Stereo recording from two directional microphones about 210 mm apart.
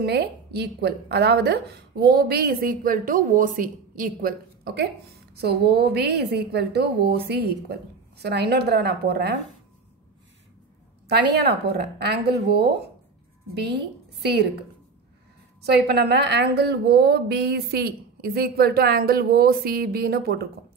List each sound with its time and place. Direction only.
0.0 s a woman's voice: 50° right (ahead or behind)
11.1 s a woman's voice: 50° right (ahead or behind)
15.6 s a woman's voice: 50° right (ahead or behind)